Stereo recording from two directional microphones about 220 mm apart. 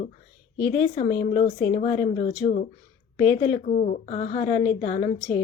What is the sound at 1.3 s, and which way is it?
Speech, 30° left (ahead or behind).